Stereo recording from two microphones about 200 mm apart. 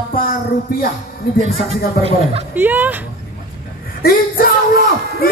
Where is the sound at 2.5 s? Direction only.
10° right (ahead or behind).